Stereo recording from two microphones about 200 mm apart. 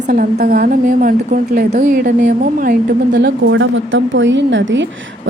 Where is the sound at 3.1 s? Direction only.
60° right (ahead or behind).